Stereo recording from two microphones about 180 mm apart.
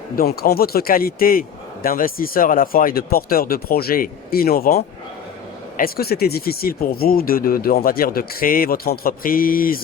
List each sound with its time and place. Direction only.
0.2 s a man's voice: 60° left (ahead or behind)